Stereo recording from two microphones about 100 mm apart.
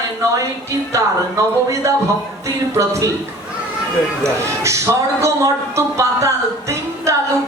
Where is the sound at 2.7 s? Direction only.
30° right (ahead or behind).